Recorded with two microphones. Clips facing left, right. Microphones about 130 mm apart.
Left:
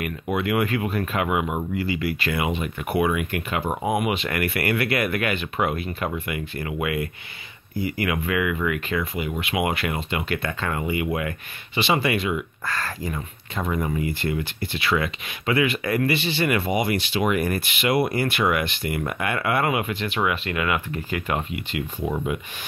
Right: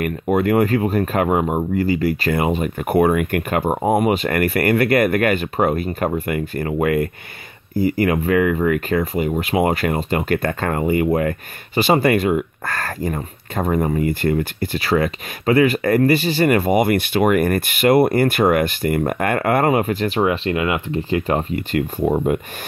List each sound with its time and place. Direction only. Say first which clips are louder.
0.0 s speech: right 7 dB; 45° right (ahead or behind)
20.2 s speech: right 5 dB; 30° right (ahead or behind); by 22.4 s 45° right (ahead or behind)